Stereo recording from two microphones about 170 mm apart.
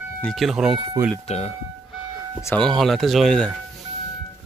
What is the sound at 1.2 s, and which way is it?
Speech, 40° left (ahead or behind).